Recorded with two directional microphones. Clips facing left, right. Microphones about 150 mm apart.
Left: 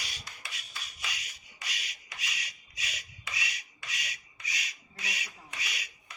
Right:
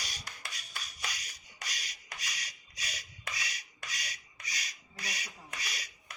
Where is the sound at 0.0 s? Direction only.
40° right (ahead or behind).